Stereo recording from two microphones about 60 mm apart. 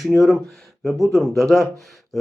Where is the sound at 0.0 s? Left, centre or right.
Centre.